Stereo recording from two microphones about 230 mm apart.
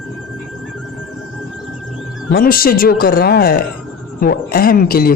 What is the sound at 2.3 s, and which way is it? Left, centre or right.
Speech, left.